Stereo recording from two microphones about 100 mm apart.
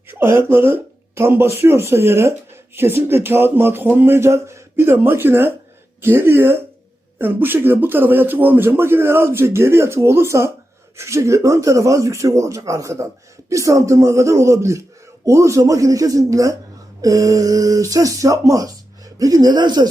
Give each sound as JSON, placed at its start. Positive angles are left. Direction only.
{"t": 0.1, "sound": "speech", "side_deg": -25}